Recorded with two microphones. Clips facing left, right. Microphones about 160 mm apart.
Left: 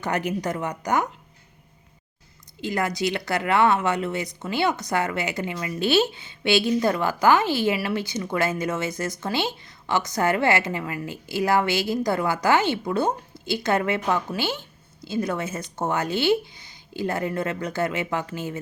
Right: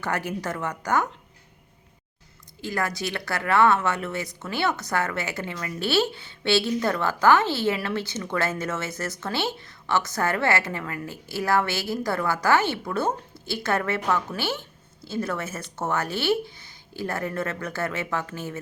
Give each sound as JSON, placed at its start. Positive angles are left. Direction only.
{"t": 0.0, "sound": "speech", "side_deg": 20}
{"t": 2.6, "sound": "speech", "side_deg": 20}